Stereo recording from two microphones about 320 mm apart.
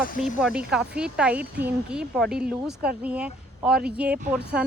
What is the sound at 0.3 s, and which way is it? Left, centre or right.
Speech, centre.